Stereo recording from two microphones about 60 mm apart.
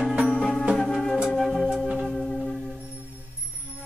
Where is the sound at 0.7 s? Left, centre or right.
Centre.